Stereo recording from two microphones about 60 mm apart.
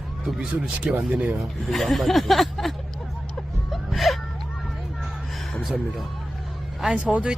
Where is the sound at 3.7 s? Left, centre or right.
Centre.